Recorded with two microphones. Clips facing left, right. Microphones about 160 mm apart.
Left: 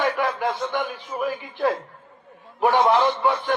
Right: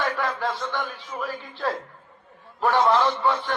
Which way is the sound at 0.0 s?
15° left (ahead or behind).